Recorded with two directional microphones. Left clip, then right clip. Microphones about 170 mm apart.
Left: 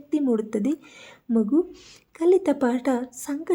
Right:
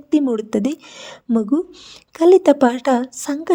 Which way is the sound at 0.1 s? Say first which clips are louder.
Right 6 dB; 40° right (ahead or behind).